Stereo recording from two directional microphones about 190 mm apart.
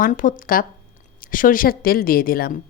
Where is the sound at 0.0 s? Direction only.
45° left (ahead or behind).